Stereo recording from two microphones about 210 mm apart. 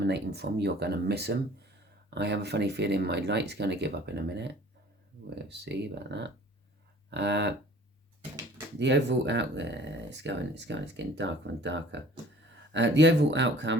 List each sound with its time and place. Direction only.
0.0 s speech: 50° right (ahead or behind)
8.8 s speech: 55° right (ahead or behind)